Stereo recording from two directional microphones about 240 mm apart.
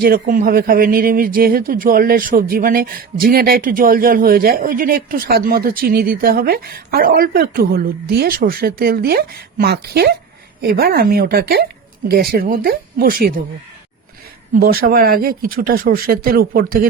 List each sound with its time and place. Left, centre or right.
0.0 s speech: right
14.5 s speech: right